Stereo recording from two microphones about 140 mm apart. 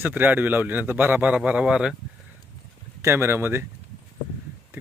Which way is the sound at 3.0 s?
15° right (ahead or behind).